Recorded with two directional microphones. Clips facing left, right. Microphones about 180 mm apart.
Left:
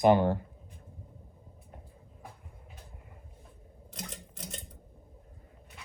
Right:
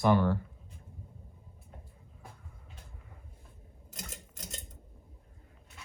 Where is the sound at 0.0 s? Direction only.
20° left (ahead or behind).